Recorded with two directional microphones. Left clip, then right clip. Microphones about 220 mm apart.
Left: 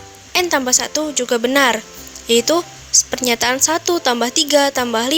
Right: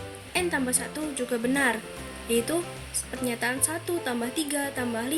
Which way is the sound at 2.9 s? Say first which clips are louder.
Left 16 dB; 40° left (ahead or behind).